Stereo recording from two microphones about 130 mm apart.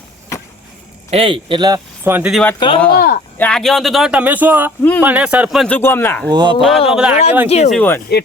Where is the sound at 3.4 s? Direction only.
5° left (ahead or behind).